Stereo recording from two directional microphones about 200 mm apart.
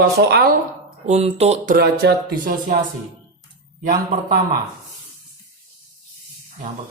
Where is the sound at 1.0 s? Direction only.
35° right (ahead or behind).